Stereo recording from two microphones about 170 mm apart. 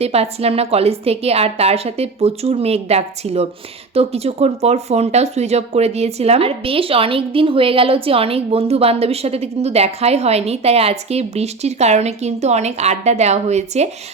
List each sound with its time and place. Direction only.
0.0 s speech: 35° right (ahead or behind)